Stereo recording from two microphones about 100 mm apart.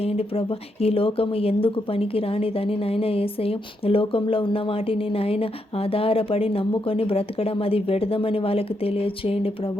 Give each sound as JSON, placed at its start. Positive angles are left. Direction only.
{"t": 0.0, "sound": "speech", "side_deg": 80}